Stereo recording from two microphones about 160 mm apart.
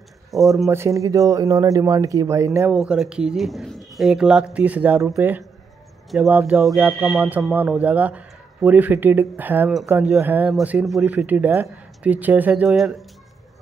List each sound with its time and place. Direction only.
0.3 s speech: centre (ahead or behind)
0.7 s speech: 20° right (ahead or behind)
2.7 s speech: 5° right (ahead or behind)